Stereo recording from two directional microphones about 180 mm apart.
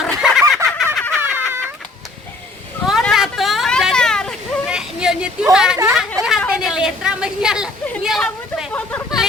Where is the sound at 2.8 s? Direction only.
Centre (ahead or behind).